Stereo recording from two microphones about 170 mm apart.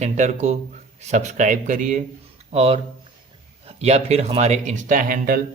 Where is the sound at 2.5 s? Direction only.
35° right (ahead or behind).